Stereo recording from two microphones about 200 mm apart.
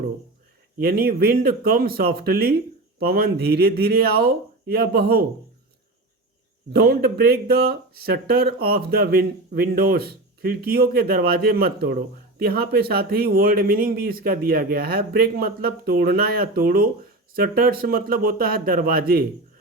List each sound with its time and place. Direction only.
0.8 s a man's voice: 50° right (ahead or behind)
6.8 s a man's voice: 50° right (ahead or behind)